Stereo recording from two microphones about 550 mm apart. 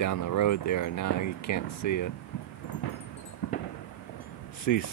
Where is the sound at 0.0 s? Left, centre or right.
Left.